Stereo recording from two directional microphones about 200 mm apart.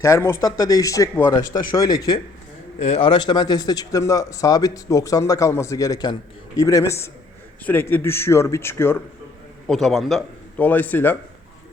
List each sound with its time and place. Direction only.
0.0 s speech: 15° left (ahead or behind)
2.7 s a man's voice: 35° left (ahead or behind); by 11.2 s 10° left (ahead or behind)